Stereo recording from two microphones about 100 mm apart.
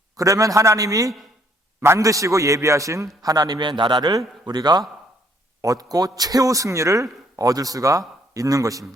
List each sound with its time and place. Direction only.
0.2 s a man's voice: 35° right (ahead or behind)